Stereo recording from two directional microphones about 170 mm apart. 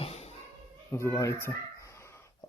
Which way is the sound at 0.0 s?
40° left (ahead or behind).